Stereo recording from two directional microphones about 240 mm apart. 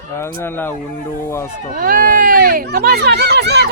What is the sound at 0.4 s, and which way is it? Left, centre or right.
Speech, centre.